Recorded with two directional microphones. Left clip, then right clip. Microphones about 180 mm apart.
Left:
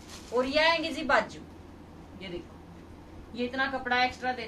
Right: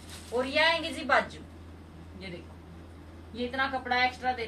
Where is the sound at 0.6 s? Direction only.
Centre (ahead or behind).